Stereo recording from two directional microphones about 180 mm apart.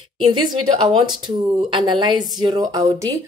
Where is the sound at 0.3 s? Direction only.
25° right (ahead or behind).